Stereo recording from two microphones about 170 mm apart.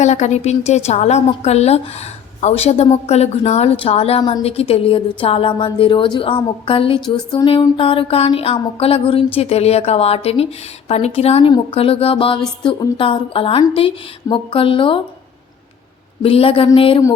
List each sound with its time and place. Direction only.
0.0 s a woman's voice: 45° left (ahead or behind)
4.2 s a woman's voice: 25° left (ahead or behind)
4.7 s a woman's voice: 35° left (ahead or behind)
16.2 s a woman's voice: 30° left (ahead or behind)